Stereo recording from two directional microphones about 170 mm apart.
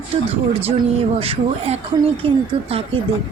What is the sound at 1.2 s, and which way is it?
Speech, 35° right (ahead or behind).